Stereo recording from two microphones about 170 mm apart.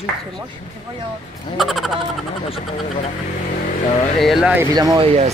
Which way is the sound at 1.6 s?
Centre (ahead or behind).